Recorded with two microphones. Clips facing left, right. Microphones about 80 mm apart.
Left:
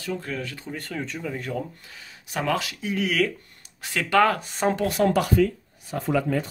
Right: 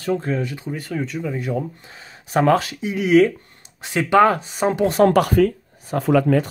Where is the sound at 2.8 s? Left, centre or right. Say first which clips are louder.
Right 10 dB; centre.